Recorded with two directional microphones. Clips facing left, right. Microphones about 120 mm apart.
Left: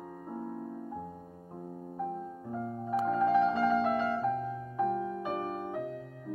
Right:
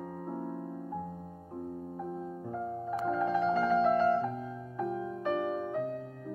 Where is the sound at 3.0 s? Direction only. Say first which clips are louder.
Left 4 dB; centre (ahead or behind).